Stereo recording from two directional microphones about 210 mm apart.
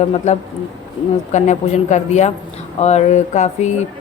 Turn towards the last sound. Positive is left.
turn(degrees=35)  # may be behind; listen again after turning